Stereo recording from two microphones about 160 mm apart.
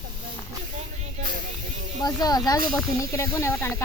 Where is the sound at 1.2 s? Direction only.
55° right (ahead or behind).